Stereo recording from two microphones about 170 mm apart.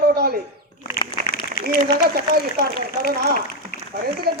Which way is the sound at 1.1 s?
75° right (ahead or behind).